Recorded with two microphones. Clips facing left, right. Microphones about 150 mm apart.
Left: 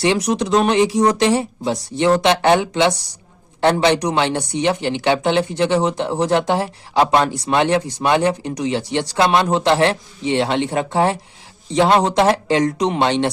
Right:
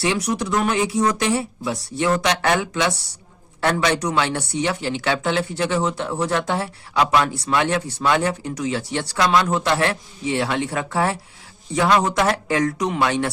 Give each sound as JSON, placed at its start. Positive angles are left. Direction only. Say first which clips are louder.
{"t": 0.0, "sound": "a man's voice", "louder": "left 4 dB", "side_deg": 25}